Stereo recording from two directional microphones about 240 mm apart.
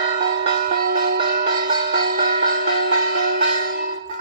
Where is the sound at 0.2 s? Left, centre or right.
Right.